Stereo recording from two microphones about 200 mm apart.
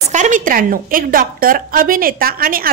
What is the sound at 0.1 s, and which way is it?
A woman's voice, 40° right (ahead or behind).